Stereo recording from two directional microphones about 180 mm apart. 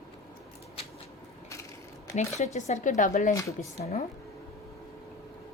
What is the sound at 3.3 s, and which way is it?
Speech, 15° left (ahead or behind).